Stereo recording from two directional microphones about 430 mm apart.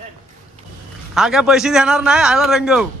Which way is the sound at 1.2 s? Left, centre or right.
Centre.